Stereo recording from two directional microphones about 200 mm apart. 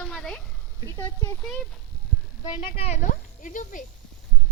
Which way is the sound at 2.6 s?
30° left (ahead or behind).